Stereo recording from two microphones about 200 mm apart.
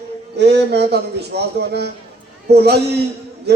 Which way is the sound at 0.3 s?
55° right (ahead or behind).